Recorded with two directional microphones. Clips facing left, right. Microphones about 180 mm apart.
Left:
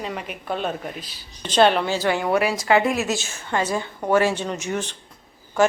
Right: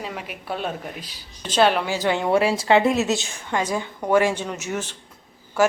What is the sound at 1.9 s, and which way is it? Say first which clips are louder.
A woman's voice: right 1 dB; 20° right (ahead or behind).